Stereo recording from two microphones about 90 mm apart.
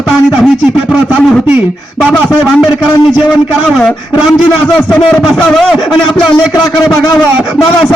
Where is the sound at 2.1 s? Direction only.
5° left (ahead or behind).